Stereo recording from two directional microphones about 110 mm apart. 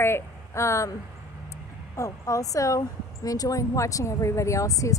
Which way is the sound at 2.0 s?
30° left (ahead or behind).